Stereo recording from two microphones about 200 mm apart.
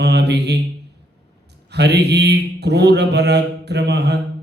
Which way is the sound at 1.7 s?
55° right (ahead or behind).